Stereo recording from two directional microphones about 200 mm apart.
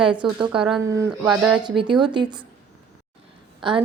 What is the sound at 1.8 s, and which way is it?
Speech, 25° right (ahead or behind).